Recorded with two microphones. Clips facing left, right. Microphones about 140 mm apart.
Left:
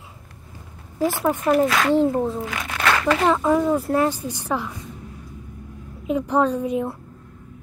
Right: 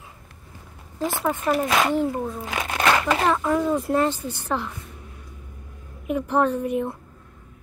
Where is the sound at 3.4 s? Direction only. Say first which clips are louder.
Left 3 dB; 15° left (ahead or behind).